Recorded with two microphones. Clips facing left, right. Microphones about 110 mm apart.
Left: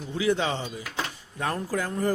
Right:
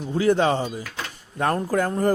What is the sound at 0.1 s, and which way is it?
A man's voice, 45° right (ahead or behind).